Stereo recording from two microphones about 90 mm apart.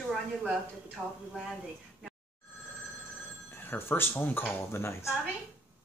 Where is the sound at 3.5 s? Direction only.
25° left (ahead or behind).